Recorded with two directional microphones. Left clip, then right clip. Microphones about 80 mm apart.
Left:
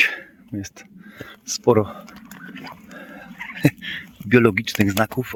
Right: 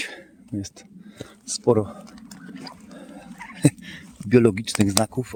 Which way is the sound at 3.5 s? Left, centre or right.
Right.